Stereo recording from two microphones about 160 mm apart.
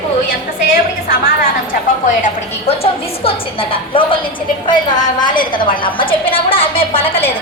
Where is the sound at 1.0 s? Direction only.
65° left (ahead or behind).